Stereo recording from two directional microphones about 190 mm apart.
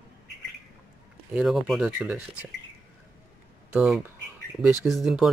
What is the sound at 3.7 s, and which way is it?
Speech, 5° right (ahead or behind).